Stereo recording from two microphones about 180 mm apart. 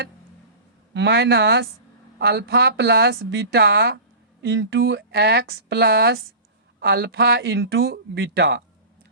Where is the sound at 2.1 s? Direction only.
65° right (ahead or behind).